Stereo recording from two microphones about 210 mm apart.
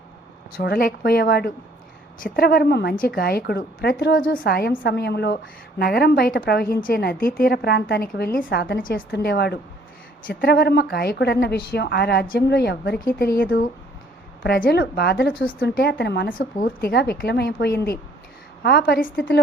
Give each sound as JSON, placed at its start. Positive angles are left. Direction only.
{"t": 0.5, "sound": "a woman's voice", "side_deg": 45}